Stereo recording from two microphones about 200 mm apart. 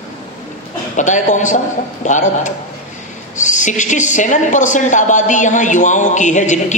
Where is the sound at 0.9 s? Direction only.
40° left (ahead or behind).